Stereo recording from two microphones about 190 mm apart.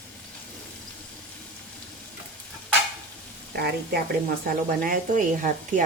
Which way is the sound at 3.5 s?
55° right (ahead or behind).